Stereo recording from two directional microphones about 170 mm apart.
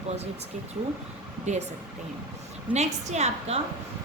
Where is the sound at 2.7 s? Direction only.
40° right (ahead or behind).